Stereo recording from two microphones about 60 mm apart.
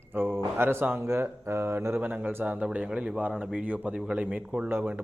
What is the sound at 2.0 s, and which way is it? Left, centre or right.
Speech, right.